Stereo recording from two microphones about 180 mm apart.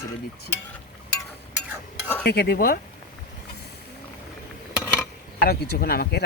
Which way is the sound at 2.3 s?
60° left (ahead or behind).